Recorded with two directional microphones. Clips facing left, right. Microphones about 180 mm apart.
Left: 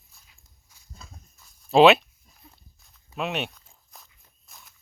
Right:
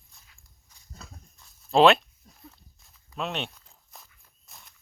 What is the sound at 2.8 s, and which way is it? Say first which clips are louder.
Walk: left 3 dB; 5° left (ahead or behind).